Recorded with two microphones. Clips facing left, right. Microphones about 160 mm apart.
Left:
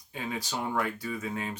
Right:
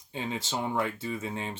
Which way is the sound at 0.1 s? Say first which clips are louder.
Right 1 dB; 25° right (ahead or behind).